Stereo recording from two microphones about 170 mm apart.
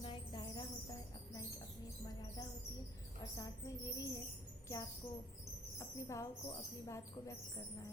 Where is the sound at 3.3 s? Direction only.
20° left (ahead or behind).